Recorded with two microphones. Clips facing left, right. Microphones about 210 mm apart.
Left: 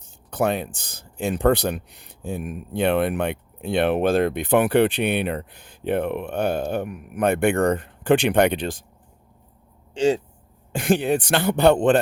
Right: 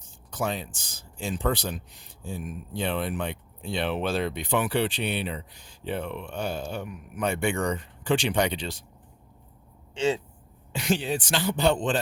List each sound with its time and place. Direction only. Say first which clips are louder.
0.3 s speech: left 7 dB; 60° left (ahead or behind)
10.7 s speech: left 7 dB; 50° left (ahead or behind)